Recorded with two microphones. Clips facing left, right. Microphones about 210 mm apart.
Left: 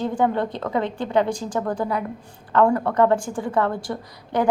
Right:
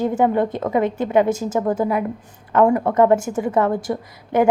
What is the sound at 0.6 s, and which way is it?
A woman's voice, 20° right (ahead or behind).